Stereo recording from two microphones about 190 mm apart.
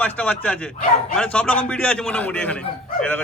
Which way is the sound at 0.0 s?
5° left (ahead or behind).